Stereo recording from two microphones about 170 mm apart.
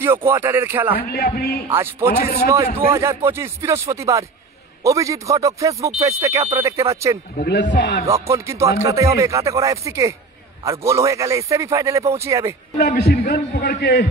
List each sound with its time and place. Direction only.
0.0 s a man's voice: 15° right (ahead or behind)
0.9 s speech: 60° left (ahead or behind)
1.8 s a man's voice: 15° right (ahead or behind)
2.1 s a man's voice: 50° left (ahead or behind)
2.9 s a man's voice: 15° right (ahead or behind)
7.3 s a man's voice: 75° left (ahead or behind)
7.7 s music: 90° left
8.1 s a man's voice: 15° right (ahead or behind)
12.7 s a man's voice: 70° left (ahead or behind)